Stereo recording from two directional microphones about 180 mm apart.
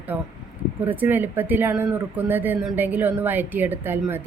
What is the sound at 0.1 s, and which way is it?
Speech, 5° right (ahead or behind).